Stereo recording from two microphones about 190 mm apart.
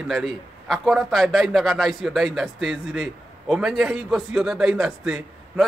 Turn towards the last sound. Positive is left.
turn(degrees=0)  # may be behind; listen again after turning